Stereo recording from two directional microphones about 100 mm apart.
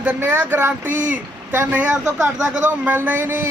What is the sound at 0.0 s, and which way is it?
A man's voice, 15° right (ahead or behind).